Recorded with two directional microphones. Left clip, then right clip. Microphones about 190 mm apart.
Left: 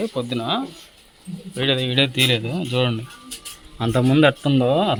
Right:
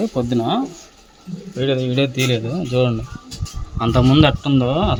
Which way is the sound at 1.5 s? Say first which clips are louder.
Even; 5° left (ahead or behind).